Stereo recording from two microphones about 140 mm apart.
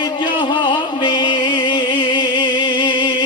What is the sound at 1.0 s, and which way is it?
Music, 35° left (ahead or behind).